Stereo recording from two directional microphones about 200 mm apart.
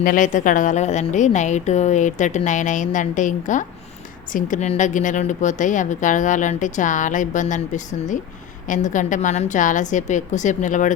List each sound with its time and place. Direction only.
0.0 s a woman's voice: 40° left (ahead or behind)